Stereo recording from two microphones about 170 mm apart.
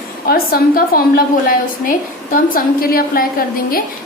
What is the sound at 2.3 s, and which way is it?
Speech, 60° left (ahead or behind).